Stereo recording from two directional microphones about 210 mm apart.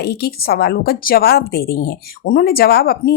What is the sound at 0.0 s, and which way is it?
A woman's voice, 50° left (ahead or behind).